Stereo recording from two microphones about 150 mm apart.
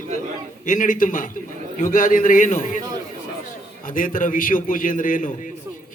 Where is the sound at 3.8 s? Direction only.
65° left (ahead or behind).